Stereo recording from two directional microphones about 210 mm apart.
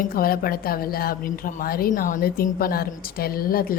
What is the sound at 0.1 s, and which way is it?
A woman's voice, 45° left (ahead or behind).